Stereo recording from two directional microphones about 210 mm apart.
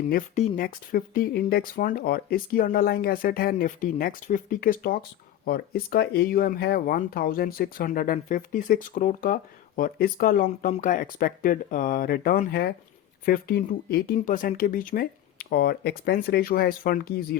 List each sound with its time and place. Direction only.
0.1 s speech: 40° left (ahead or behind)